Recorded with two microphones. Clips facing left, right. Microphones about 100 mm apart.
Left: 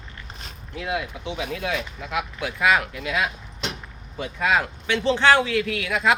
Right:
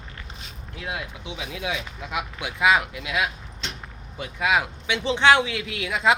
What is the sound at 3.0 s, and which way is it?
Speech, 10° right (ahead or behind).